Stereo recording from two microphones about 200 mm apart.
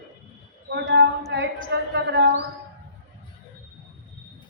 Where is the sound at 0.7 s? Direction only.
60° right (ahead or behind).